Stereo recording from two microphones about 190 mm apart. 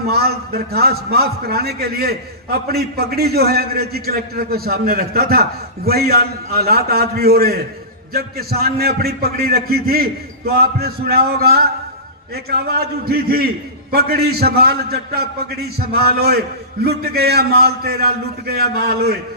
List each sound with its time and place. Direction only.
0.1 s a man's voice: 55° right (ahead or behind)